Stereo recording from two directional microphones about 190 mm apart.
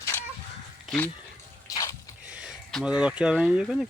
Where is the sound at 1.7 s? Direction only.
15° left (ahead or behind).